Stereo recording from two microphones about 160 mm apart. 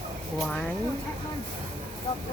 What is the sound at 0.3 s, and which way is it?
Speech, 5° left (ahead or behind).